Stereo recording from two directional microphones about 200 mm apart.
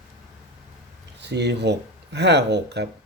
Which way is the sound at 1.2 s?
60° right (ahead or behind).